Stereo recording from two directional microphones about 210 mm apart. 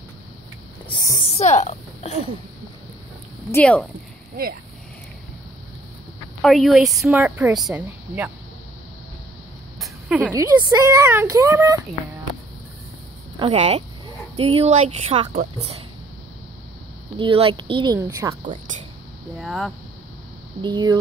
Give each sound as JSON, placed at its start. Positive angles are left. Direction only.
{"t": 0.8, "sound": "speech", "side_deg": 20}
{"t": 1.4, "sound": "speech", "side_deg": 35}
{"t": 3.5, "sound": "speech", "side_deg": 5}
{"t": 6.4, "sound": "speech", "side_deg": 0}
{"t": 9.8, "sound": "a sound", "side_deg": -5}
{"t": 10.3, "sound": "speech", "side_deg": -15}
{"t": 13.4, "sound": "speech", "side_deg": -25}
{"t": 17.2, "sound": "speech", "side_deg": -25}
{"t": 19.3, "sound": "speech", "side_deg": 0}
{"t": 20.6, "sound": "speech", "side_deg": -20}